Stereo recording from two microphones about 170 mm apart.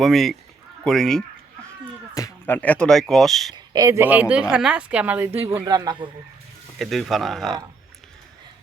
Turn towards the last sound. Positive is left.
turn(degrees=0)  # may be behind; listen again after turning